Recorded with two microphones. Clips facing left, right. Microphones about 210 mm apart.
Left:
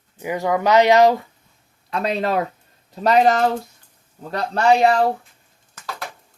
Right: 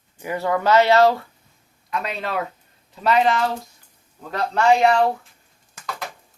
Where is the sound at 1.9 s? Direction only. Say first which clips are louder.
Left 6 dB; 35° left (ahead or behind).